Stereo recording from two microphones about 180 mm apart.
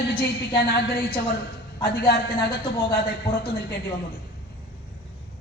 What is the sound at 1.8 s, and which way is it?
A woman's voice, 55° left (ahead or behind).